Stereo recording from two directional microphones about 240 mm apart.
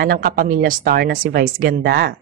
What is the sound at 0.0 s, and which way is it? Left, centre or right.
A woman's voice, right.